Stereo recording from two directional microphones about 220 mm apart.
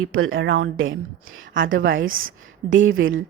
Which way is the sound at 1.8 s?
45° right (ahead or behind).